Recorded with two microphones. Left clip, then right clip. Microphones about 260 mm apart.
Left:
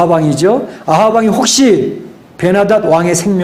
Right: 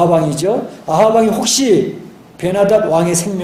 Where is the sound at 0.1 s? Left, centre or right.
Left.